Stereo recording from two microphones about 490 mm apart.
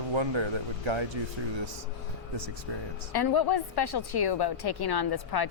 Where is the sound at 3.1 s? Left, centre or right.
Left.